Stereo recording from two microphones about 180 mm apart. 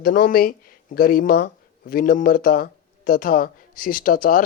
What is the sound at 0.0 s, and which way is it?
Speech, 55° left (ahead or behind).